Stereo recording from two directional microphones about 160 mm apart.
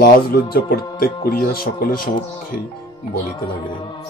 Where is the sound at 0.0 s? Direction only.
65° left (ahead or behind).